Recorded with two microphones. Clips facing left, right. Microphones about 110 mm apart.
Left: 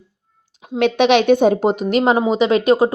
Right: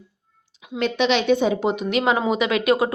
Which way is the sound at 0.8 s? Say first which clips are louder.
Left 7 dB; 65° left (ahead or behind).